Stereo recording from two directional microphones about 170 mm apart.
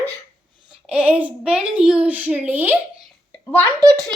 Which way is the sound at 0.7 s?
5° right (ahead or behind).